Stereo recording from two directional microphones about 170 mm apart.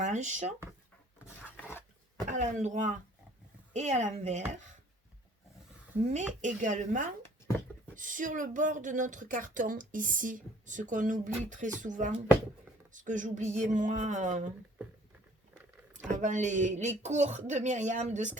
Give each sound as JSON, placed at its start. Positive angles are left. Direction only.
{"t": 0.0, "sound": "speech", "side_deg": -45}
{"t": 2.2, "sound": "speech", "side_deg": -45}
{"t": 6.0, "sound": "speech", "side_deg": -40}
{"t": 16.0, "sound": "speech", "side_deg": -45}